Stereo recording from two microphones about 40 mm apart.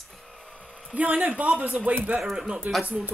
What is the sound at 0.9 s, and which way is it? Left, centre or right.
Speech, right.